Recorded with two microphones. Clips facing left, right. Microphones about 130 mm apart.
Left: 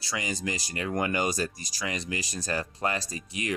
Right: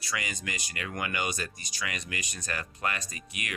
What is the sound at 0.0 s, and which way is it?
Speech, 30° left (ahead or behind).